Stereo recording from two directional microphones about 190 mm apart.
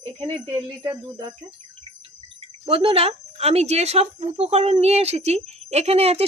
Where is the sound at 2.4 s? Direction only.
30° right (ahead or behind).